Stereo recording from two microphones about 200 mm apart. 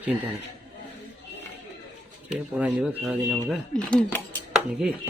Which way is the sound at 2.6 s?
5° right (ahead or behind).